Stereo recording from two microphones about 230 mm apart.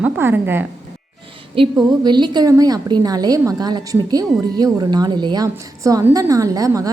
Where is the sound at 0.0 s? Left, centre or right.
Centre.